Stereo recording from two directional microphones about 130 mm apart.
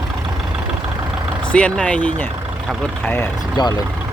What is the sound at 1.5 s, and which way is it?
Speech, 10° left (ahead or behind).